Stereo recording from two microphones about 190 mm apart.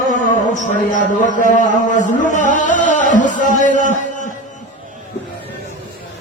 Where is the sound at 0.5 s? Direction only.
40° left (ahead or behind).